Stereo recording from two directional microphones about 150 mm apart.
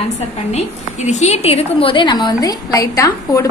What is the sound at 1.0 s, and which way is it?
A woman's voice, 50° left (ahead or behind).